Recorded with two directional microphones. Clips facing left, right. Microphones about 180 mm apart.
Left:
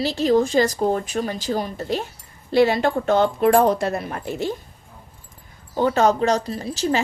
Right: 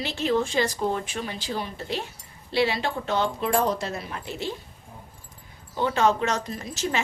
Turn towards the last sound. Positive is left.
turn(degrees=35)  # may be behind; listen again after turning